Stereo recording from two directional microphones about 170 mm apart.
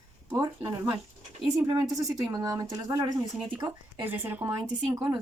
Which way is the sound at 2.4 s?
20° right (ahead or behind).